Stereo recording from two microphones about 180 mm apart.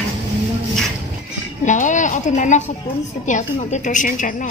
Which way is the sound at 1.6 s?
45° left (ahead or behind).